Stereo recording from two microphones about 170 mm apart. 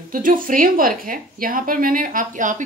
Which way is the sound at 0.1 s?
50° right (ahead or behind).